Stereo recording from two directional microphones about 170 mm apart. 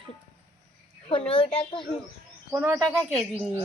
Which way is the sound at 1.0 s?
35° left (ahead or behind).